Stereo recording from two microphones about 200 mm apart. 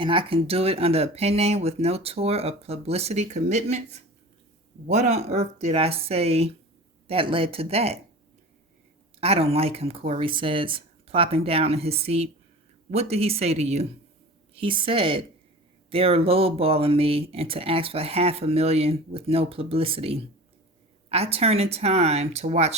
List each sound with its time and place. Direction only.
0.0 s speech: 25° right (ahead or behind)
9.2 s speech: 30° right (ahead or behind)